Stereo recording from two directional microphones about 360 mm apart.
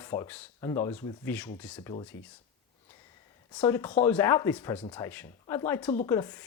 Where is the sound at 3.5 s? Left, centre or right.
Centre.